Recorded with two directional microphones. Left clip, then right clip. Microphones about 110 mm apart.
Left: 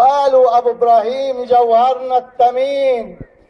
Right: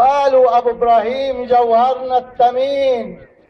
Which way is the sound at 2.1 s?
10° left (ahead or behind).